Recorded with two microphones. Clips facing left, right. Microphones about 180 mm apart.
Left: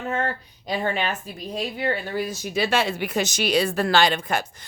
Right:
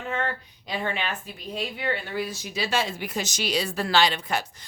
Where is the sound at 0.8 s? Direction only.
45° left (ahead or behind).